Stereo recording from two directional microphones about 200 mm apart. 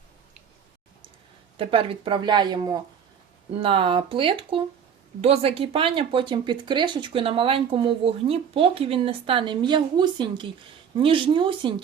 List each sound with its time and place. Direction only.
1.5 s speech: 25° right (ahead or behind)